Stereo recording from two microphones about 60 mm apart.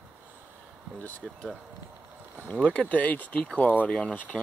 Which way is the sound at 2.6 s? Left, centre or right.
Left.